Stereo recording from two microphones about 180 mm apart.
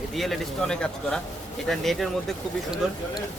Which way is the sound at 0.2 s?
Centre (ahead or behind).